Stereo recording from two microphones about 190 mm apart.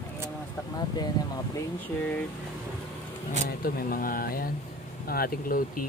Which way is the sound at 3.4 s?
50° left (ahead or behind).